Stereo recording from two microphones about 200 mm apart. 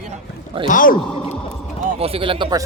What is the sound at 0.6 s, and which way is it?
Speech, 45° left (ahead or behind).